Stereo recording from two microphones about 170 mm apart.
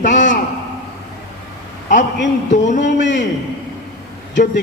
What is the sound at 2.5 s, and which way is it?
Speech, 45° left (ahead or behind).